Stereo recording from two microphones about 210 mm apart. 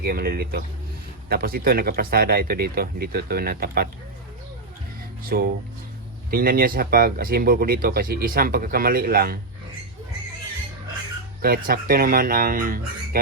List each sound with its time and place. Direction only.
0.0 s speech: 45° right (ahead or behind)
5.3 s speech: 45° right (ahead or behind)
11.4 s speech: 45° right (ahead or behind)